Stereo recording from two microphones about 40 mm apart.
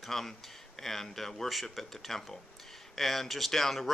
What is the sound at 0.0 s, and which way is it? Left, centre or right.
Speech, centre.